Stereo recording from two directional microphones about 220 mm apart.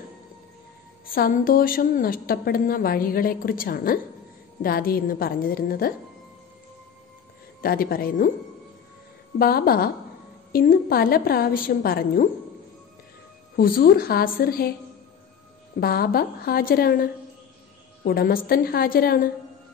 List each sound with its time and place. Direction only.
1.0 s a woman's voice: 40° left (ahead or behind)
7.6 s a woman's voice: 40° left (ahead or behind)
9.4 s a woman's voice: 45° left (ahead or behind)
13.6 s a woman's voice: 40° left (ahead or behind)
15.8 s a woman's voice: 45° left (ahead or behind)